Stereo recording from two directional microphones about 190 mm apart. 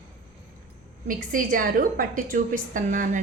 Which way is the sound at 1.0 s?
45° right (ahead or behind).